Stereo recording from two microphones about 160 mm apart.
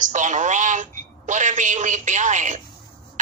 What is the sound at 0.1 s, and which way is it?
Telephone, 50° right (ahead or behind).